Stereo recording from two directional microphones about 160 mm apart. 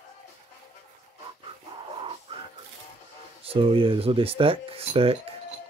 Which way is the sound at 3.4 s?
35° right (ahead or behind).